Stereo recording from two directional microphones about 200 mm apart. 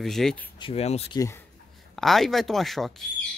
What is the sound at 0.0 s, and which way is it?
Speech, centre (ahead or behind).